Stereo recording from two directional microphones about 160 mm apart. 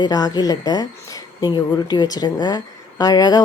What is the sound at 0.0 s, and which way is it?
A woman's voice, 25° left (ahead or behind).